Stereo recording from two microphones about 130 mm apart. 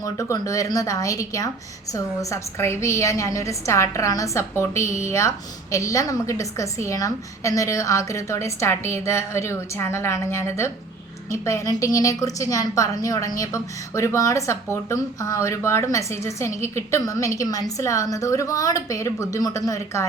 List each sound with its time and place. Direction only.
0.0 s a woman's voice: 25° left (ahead or behind)